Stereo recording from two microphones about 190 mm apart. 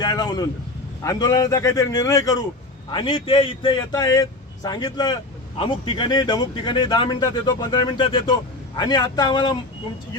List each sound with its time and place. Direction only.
0.0 s vehicle: 20° left (ahead or behind)
1.0 s speech: 20° left (ahead or behind)